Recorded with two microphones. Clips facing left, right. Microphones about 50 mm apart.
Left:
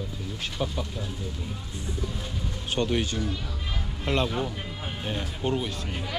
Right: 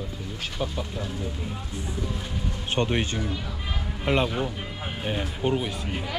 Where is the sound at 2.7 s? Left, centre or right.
Right.